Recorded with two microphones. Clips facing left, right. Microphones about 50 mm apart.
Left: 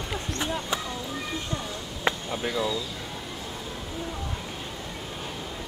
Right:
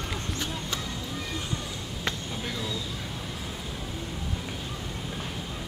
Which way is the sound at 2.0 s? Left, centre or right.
Left.